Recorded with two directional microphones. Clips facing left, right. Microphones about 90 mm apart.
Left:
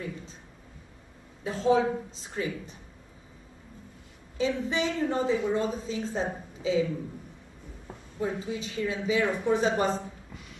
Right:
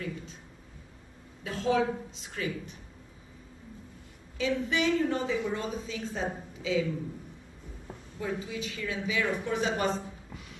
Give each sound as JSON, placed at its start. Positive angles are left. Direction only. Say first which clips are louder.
{"t": 1.4, "sound": "a woman's voice", "louder": "left 3 dB", "side_deg": 35}
{"t": 4.4, "sound": "a woman's voice", "louder": "left 1 dB", "side_deg": 35}
{"t": 8.2, "sound": "a woman's voice", "louder": "left 3 dB", "side_deg": 30}